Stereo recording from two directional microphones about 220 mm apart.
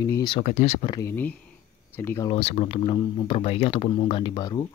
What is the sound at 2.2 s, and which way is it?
Speech, 25° left (ahead or behind).